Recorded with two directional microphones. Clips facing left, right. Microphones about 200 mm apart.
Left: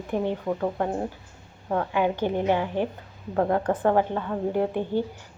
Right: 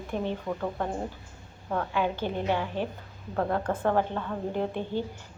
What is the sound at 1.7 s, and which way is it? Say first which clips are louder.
A woman's voice: left 4 dB; 15° left (ahead or behind).